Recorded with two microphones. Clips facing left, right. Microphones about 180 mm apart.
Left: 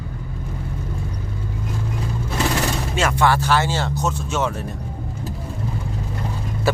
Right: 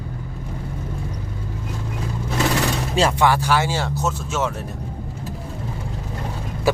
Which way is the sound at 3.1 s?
10° right (ahead or behind).